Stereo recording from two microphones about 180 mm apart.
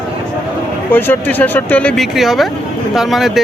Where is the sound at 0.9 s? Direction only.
10° left (ahead or behind).